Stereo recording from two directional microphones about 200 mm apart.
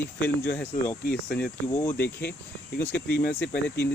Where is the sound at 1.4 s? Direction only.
10° left (ahead or behind).